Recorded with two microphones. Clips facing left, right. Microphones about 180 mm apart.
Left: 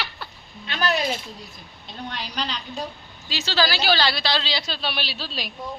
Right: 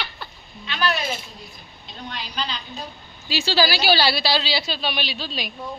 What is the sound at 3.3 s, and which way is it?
A woman's voice, 10° right (ahead or behind).